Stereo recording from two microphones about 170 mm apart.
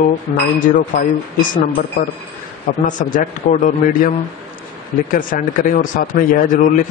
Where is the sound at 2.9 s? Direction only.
50° left (ahead or behind).